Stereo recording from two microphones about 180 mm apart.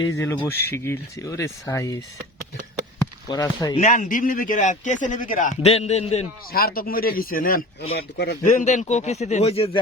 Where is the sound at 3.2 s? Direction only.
20° left (ahead or behind).